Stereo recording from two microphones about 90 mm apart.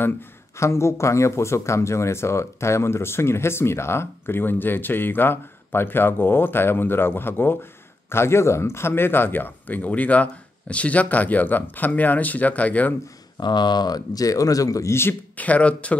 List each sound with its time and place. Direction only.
0.6 s speech: 30° left (ahead or behind)
13.4 s a man's voice: 55° left (ahead or behind); by 16.0 s 15° left (ahead or behind)